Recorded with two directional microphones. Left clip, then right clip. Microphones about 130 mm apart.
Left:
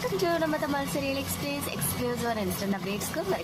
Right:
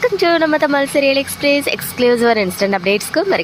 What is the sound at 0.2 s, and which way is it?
Speech, 45° right (ahead or behind).